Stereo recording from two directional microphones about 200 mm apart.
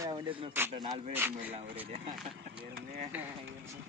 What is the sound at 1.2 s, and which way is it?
Speech, 10° right (ahead or behind).